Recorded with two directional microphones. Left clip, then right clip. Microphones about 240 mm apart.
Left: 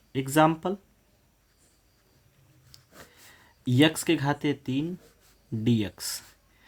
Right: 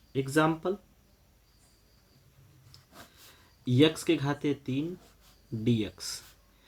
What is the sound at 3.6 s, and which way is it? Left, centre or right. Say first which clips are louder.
Speech: left 2 dB; left.